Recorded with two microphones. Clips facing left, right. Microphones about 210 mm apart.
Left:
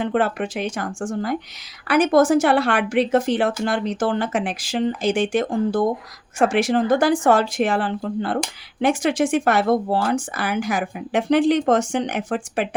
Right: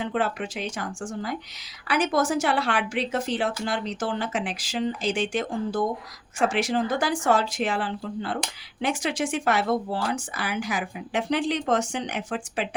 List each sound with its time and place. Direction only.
0.0 s speech: 55° left (ahead or behind)